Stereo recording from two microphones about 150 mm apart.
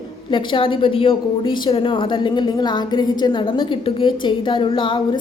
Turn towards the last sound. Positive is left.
turn(degrees=35)  # may be behind; listen again after turning